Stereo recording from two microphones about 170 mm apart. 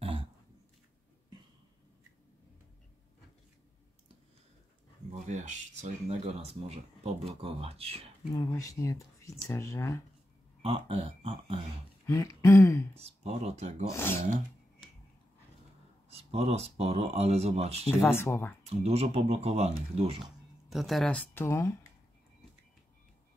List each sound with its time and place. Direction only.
0.0 s a sound: 35° right (ahead or behind)
5.3 s speech: 45° right (ahead or behind)
8.3 s speech: 20° left (ahead or behind)
10.6 s speech: 35° right (ahead or behind)
12.1 s speech: 15° left (ahead or behind)
12.9 s speech: 35° right (ahead or behind)
16.1 s speech: 35° right (ahead or behind)
18.0 s speech: 15° left (ahead or behind)
18.7 s speech: 35° right (ahead or behind)
20.7 s speech: centre (ahead or behind); by 21.7 s 15° left (ahead or behind)